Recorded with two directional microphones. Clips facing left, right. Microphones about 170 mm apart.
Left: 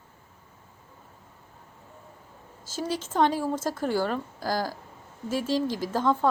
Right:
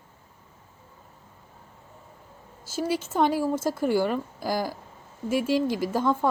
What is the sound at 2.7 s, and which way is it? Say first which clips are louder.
A woman's voice: right 3 dB; 10° right (ahead or behind).